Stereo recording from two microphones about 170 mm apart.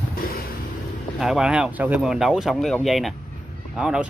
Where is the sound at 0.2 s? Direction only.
60° left (ahead or behind).